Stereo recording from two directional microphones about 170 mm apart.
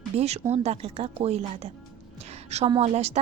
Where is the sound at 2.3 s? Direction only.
40° right (ahead or behind).